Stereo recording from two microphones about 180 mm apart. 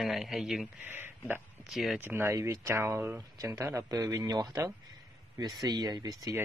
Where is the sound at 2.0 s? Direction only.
15° right (ahead or behind).